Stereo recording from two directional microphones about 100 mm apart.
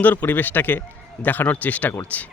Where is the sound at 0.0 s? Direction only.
20° left (ahead or behind).